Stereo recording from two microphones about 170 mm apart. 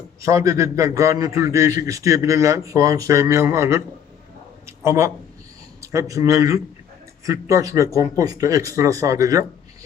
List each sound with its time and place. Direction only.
0.2 s a man's voice: 20° right (ahead or behind)
4.6 s a sound: 15° right (ahead or behind)
5.8 s a man's voice: 15° right (ahead or behind)